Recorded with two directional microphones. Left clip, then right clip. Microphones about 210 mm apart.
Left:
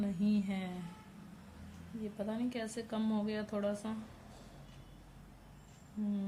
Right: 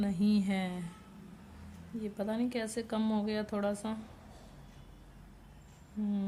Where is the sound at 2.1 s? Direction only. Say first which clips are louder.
Right 4 dB; 30° right (ahead or behind).